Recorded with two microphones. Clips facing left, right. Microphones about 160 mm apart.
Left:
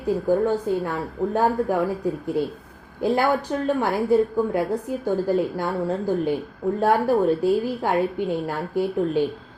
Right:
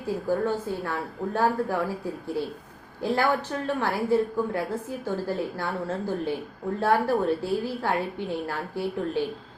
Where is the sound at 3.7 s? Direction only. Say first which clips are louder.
Left 3 dB; 15° left (ahead or behind).